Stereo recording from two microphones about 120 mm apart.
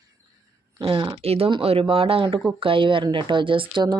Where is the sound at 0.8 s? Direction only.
45° right (ahead or behind).